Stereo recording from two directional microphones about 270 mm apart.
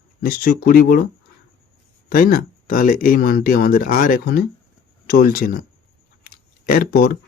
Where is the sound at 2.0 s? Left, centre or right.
Left.